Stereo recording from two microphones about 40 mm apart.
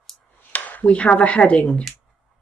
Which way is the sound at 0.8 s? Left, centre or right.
Left.